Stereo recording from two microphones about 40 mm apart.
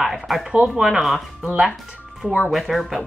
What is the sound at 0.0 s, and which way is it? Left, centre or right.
Speech, centre.